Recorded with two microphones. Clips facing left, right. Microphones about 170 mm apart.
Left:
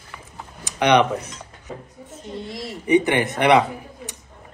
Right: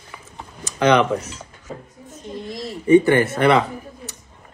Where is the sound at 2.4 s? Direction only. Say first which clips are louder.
Right 5 dB; 20° left (ahead or behind).